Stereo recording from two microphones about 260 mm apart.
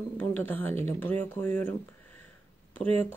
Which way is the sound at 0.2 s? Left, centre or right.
Centre.